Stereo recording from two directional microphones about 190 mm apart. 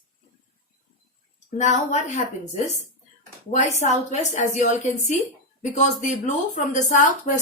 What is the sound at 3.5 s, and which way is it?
Speech, 40° left (ahead or behind).